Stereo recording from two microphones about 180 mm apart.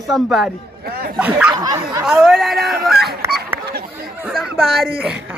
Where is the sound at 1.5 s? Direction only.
20° right (ahead or behind).